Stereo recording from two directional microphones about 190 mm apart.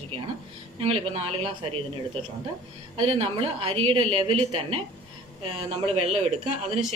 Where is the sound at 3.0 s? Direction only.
30° right (ahead or behind).